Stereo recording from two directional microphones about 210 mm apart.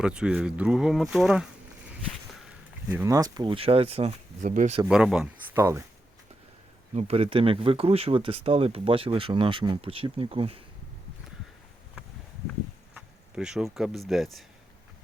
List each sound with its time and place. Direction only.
0.0 s speech: 5° right (ahead or behind)
2.9 s speech: 15° right (ahead or behind); by 4.8 s 35° right (ahead or behind)
4.9 s speech: 5° right (ahead or behind)
6.9 s speech: 30° right (ahead or behind)
12.9 s speech: 5° right (ahead or behind)